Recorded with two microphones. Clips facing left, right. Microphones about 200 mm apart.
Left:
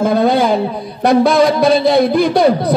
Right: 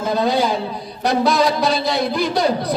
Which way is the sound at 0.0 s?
55° left (ahead or behind).